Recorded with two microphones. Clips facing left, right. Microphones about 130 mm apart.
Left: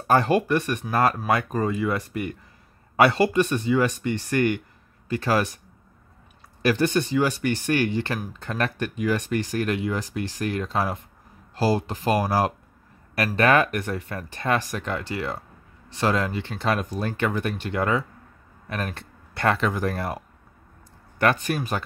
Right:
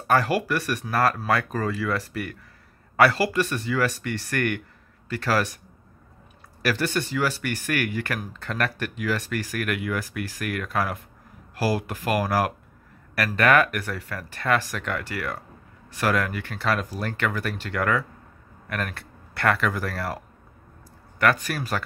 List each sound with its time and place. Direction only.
0.0 s speech: 25° left (ahead or behind)
6.6 s speech: 20° left (ahead or behind)